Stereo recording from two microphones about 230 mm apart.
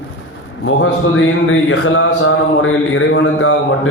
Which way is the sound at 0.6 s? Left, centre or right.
Left.